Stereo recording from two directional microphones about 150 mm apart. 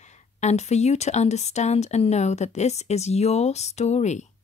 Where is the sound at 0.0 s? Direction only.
50° left (ahead or behind).